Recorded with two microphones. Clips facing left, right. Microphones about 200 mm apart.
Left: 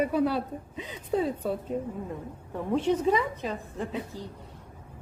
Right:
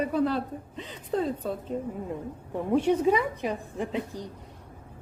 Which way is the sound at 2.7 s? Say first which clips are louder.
Right 2 dB; 10° right (ahead or behind).